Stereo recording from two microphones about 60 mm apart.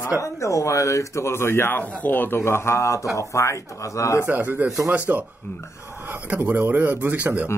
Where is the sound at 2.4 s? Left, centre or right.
Left.